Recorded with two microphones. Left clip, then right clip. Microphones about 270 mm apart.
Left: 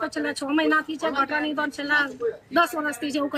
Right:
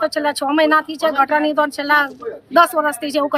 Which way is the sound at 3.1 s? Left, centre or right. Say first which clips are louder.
Right 8 dB; centre.